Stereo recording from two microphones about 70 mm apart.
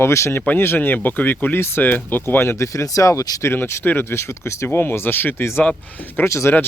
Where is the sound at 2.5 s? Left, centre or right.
Left.